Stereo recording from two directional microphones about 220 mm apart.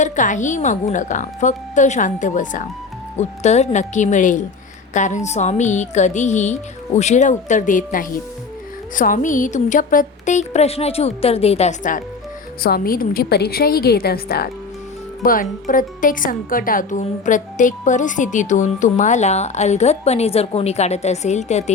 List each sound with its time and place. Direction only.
0.0 s a woman's voice: 35° left (ahead or behind)